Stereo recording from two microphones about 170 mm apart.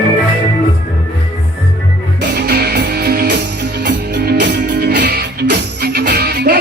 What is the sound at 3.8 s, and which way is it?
Music, 80° right.